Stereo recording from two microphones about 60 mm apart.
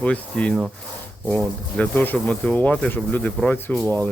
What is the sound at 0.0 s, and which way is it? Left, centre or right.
Speech, left.